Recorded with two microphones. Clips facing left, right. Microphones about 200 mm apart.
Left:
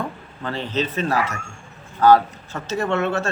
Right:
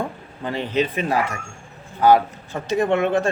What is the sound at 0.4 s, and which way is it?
Speech, 15° right (ahead or behind).